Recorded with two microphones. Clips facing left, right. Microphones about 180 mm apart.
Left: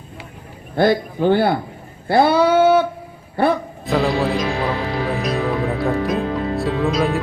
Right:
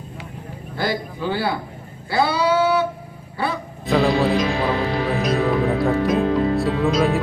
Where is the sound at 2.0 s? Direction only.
55° left (ahead or behind).